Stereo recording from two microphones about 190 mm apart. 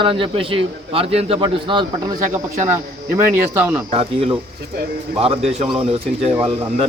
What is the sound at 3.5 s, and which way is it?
Speech, 15° right (ahead or behind).